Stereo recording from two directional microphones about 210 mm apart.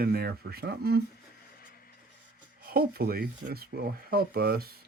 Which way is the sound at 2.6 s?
45° right (ahead or behind).